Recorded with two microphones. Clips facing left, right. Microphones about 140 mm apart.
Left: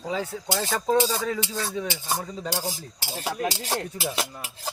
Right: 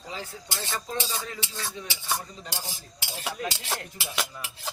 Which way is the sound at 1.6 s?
40° left (ahead or behind).